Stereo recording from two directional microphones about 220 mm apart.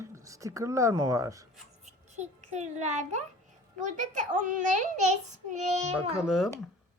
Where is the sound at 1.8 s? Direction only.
30° right (ahead or behind).